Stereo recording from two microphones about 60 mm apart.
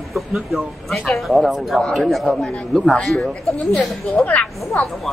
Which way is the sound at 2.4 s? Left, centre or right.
Centre.